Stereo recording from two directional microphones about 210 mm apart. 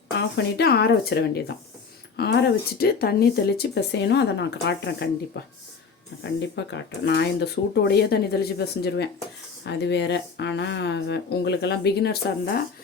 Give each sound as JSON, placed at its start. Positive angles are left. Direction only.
{"t": 0.2, "sound": "speech", "side_deg": 55}